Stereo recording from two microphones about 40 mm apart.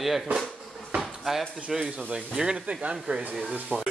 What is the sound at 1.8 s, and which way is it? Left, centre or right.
Speech, right.